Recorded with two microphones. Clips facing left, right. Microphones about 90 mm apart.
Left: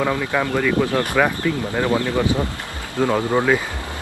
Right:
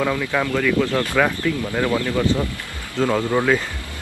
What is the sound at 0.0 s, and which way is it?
Speech, 20° left (ahead or behind).